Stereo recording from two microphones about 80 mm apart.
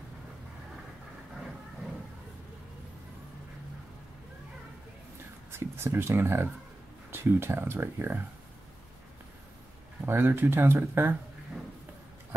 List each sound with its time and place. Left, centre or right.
5.5 s speech: right
10.0 s speech: right